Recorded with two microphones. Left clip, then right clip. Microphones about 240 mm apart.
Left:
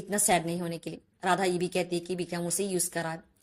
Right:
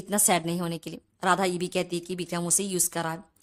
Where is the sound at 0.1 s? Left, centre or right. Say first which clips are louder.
Right 2 dB; centre.